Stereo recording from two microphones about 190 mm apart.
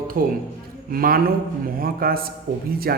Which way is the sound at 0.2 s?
50° right (ahead or behind).